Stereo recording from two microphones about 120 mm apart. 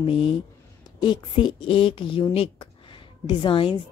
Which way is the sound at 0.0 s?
45° left (ahead or behind).